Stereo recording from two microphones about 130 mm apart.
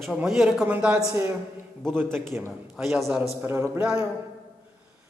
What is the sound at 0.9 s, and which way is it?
Speech, 20° right (ahead or behind).